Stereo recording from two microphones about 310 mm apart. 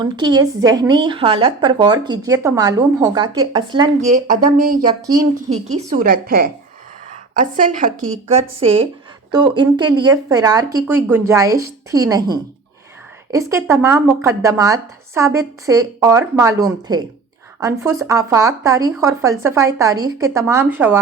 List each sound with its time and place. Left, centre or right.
0.0 s a woman's voice: centre
4.8 s a woman's voice: centre